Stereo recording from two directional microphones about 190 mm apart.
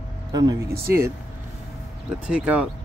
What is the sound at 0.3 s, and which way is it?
Speech, 20° right (ahead or behind).